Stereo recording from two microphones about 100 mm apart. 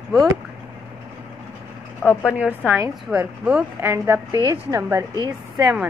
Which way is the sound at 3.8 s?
25° right (ahead or behind).